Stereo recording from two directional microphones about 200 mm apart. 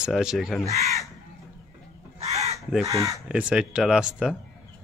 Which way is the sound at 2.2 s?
30° right (ahead or behind).